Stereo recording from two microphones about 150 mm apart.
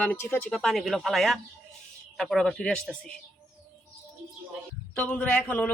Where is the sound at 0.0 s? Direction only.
15° left (ahead or behind).